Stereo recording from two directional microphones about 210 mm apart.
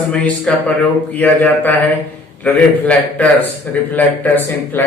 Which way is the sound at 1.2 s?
10° left (ahead or behind).